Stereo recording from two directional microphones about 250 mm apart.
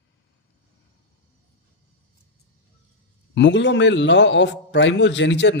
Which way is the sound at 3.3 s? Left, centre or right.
Left.